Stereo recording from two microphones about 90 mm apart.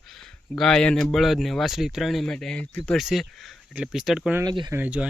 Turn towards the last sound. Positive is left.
turn(degrees=-20)  # may be behind; listen again after turning